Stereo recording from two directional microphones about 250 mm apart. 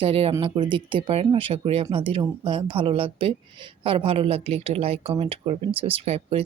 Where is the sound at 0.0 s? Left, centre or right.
Right.